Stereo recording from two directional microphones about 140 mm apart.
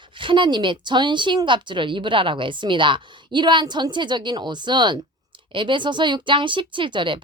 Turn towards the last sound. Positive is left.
turn(degrees=-35)  # may be behind; listen again after turning